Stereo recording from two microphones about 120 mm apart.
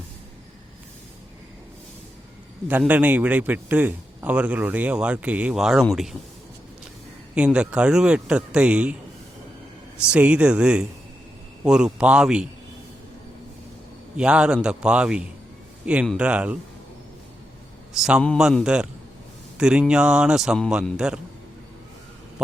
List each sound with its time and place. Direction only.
2.6 s a man's voice: 15° right (ahead or behind)
7.3 s a man's voice: 10° right (ahead or behind)
10.0 s a man's voice: 10° right (ahead or behind)
14.2 s a man's voice: 10° right (ahead or behind)
17.9 s a man's voice: 5° right (ahead or behind)